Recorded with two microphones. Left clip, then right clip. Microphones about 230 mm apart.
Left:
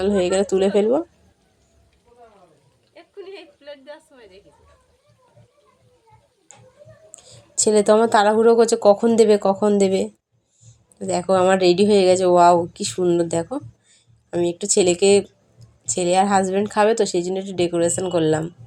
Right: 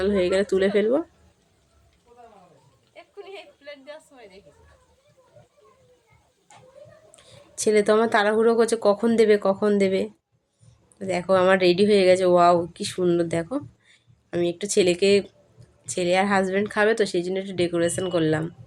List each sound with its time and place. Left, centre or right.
0.0 s speech: centre
2.9 s a sound: left
7.2 s speech: centre